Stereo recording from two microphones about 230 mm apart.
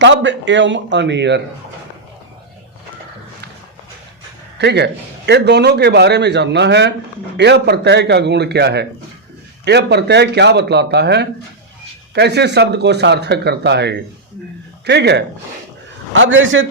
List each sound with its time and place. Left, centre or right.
0.0 s a man's voice: right
4.5 s a man's voice: right